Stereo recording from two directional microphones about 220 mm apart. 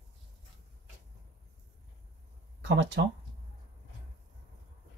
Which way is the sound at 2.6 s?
55° right (ahead or behind).